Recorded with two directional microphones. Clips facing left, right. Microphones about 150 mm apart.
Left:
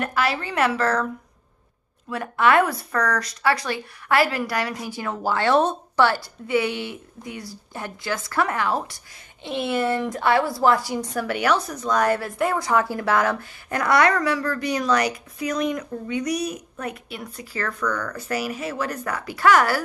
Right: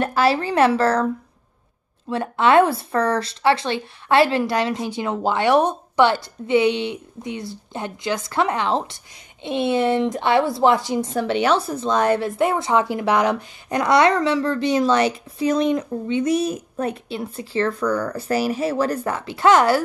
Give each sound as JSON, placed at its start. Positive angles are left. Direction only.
{"t": 0.0, "sound": "a woman's voice", "side_deg": -30}
{"t": 2.0, "sound": "speech", "side_deg": -25}